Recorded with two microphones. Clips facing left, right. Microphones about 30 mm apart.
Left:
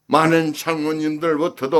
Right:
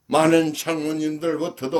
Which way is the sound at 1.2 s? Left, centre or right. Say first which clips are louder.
Left 5 dB; left.